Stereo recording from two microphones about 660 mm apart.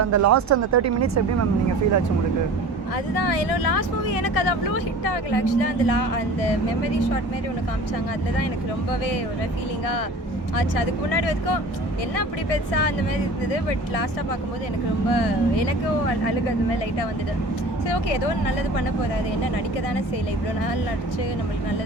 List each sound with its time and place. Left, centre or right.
0.0 s speech: right
3.2 s speech: left
10.6 s speech: left
15.1 s speech: left
17.8 s speech: left